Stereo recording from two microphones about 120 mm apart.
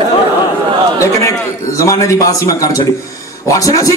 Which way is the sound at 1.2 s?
25° left (ahead or behind).